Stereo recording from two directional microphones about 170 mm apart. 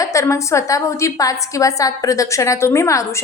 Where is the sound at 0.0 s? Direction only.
20° left (ahead or behind).